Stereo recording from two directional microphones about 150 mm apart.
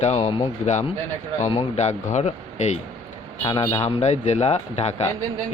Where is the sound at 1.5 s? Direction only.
45° left (ahead or behind).